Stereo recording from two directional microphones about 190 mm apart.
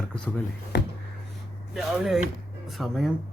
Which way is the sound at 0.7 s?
60° left (ahead or behind).